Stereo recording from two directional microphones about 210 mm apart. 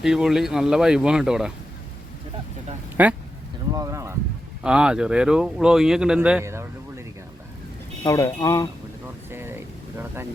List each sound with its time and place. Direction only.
0.0 s speech: centre (ahead or behind)
3.0 s speech: 5° right (ahead or behind)
3.7 s a sound: 15° right (ahead or behind)
4.6 s speech: 5° right (ahead or behind)
8.0 s speech: 15° left (ahead or behind)
9.3 s vehicle: 10° right (ahead or behind)